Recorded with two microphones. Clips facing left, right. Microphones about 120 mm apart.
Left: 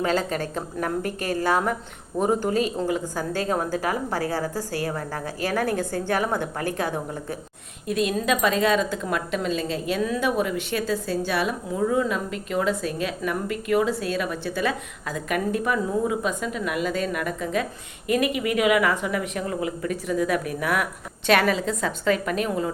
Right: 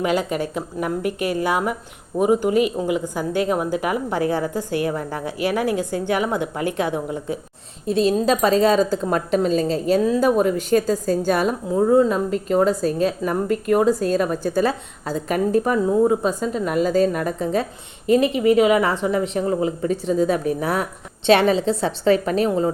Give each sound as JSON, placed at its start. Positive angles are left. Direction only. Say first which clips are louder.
{"t": 0.0, "sound": "speech", "louder": "right 3 dB", "side_deg": -15}
{"t": 7.9, "sound": "a woman's voice", "louder": "right 5 dB", "side_deg": -30}